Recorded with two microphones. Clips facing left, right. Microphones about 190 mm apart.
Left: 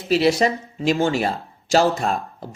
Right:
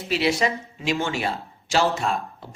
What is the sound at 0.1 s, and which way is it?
Speech, 40° left (ahead or behind).